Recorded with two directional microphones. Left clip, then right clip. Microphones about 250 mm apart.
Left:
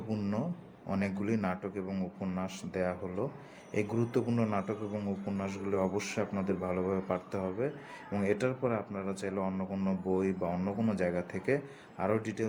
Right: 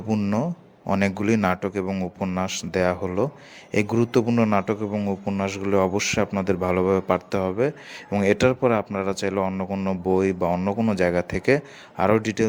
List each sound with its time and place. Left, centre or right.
0.1 s speech: right